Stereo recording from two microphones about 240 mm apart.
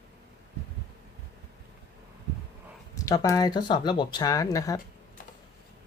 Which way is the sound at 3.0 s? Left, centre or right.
Centre.